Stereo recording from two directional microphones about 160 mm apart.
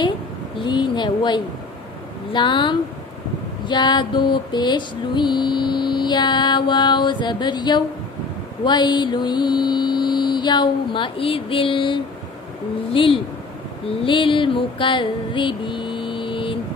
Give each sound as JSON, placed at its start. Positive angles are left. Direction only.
{"t": 0.7, "sound": "mantra", "side_deg": 30}
{"t": 12.9, "sound": "speech", "side_deg": 35}
{"t": 13.8, "sound": "a sound", "side_deg": 30}